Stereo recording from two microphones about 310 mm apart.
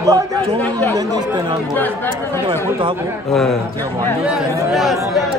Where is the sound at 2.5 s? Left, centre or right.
Centre.